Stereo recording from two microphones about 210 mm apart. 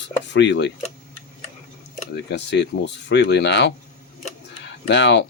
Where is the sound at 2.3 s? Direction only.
55° left (ahead or behind).